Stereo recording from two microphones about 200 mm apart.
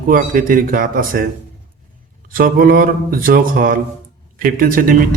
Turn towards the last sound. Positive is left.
turn(degrees=-45)  # may be behind; listen again after turning